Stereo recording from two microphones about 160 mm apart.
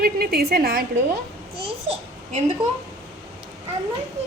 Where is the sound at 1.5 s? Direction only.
35° right (ahead or behind).